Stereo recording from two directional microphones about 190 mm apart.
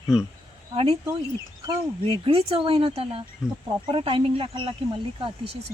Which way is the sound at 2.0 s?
30° right (ahead or behind).